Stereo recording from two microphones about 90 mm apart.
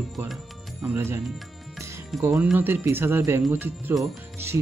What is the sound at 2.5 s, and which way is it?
Speech, 20° right (ahead or behind).